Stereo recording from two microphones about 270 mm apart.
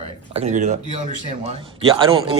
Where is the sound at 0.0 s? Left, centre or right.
Right.